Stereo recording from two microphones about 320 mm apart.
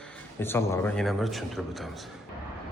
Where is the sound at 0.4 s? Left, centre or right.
Centre.